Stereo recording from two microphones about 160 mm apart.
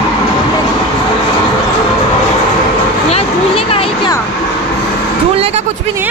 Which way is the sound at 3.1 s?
40° left (ahead or behind).